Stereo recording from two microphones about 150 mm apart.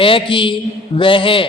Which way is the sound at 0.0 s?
35° left (ahead or behind).